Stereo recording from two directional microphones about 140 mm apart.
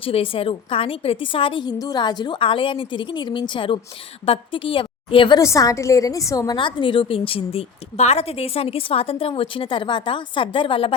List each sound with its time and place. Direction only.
0.0 s a woman's voice: 40° left (ahead or behind)
5.4 s a woman's voice: 25° left (ahead or behind); by 10.9 s 40° left (ahead or behind)